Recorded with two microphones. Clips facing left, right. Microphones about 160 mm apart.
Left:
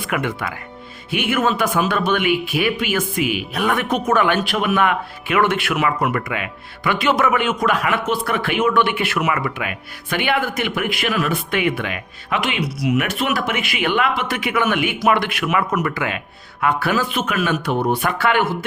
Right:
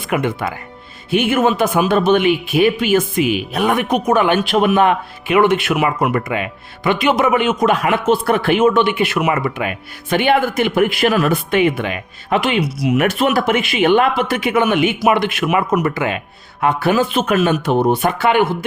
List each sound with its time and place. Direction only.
0.1 s speech: 20° right (ahead or behind)
4.5 s speech: 30° right (ahead or behind)
6.1 s speech: 30° right (ahead or behind)
14.4 s speech: 25° right (ahead or behind)